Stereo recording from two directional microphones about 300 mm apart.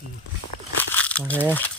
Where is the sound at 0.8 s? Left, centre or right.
Centre.